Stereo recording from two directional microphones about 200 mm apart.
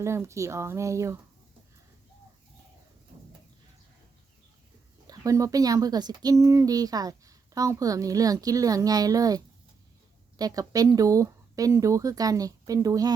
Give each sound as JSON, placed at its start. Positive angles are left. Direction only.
{"t": 0.0, "sound": "speech", "side_deg": -15}
{"t": 5.0, "sound": "speech", "side_deg": -15}